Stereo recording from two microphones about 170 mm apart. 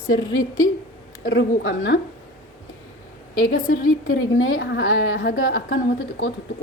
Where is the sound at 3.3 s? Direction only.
55° left (ahead or behind).